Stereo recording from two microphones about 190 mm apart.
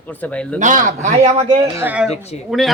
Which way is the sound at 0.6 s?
40° right (ahead or behind).